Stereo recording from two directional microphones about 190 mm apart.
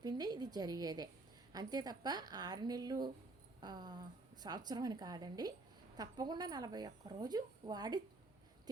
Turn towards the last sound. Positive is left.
turn(degrees=-20)  # may be behind; listen again after turning